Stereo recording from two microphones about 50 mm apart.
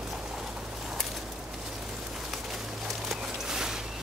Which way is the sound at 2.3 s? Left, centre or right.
Centre.